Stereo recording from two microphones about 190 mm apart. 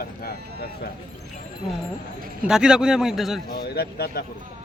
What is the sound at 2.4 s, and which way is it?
Speech, 5° right (ahead or behind).